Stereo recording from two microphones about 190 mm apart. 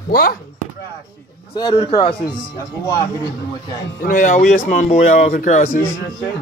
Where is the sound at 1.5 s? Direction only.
30° left (ahead or behind).